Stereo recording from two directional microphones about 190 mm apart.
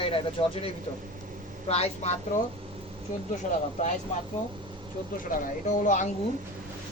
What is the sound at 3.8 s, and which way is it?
Speech, 40° left (ahead or behind).